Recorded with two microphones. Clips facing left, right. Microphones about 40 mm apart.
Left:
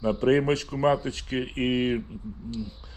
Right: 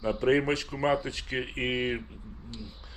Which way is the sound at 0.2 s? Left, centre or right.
Right.